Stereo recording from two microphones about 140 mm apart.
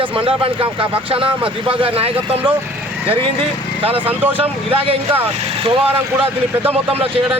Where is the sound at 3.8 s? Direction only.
40° right (ahead or behind).